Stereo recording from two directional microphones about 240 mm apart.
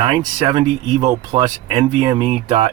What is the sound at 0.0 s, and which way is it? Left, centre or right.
Speech, centre.